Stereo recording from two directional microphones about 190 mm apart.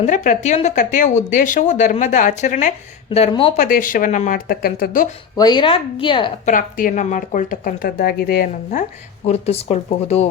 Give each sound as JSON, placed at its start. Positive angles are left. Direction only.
{"t": 0.0, "sound": "speech", "side_deg": 40}
{"t": 3.6, "sound": "speech", "side_deg": 45}
{"t": 5.4, "sound": "a woman's voice", "side_deg": 25}
{"t": 6.4, "sound": "speech", "side_deg": 45}